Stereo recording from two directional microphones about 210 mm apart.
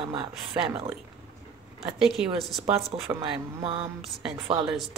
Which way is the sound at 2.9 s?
25° right (ahead or behind).